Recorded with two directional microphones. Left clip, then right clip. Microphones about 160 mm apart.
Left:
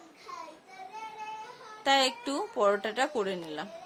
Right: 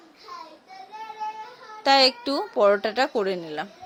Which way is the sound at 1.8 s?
30° right (ahead or behind).